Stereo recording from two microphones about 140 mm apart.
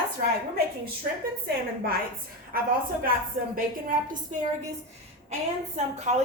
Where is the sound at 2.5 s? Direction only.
90° right.